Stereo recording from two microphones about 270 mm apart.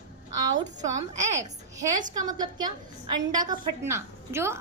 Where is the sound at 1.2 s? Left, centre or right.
Right.